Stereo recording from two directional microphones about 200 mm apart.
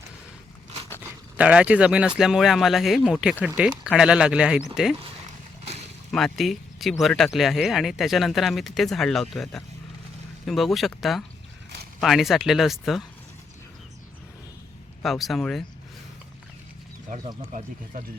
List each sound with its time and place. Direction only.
1.4 s speech: 5° right (ahead or behind)
6.1 s speech: centre (ahead or behind)
15.0 s speech: centre (ahead or behind)